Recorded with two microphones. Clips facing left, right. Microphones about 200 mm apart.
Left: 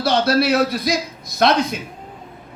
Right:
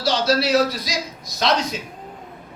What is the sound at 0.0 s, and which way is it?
A man's voice, 55° left (ahead or behind).